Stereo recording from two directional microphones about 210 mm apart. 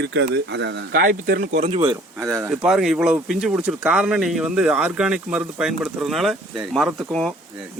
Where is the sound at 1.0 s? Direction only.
40° right (ahead or behind).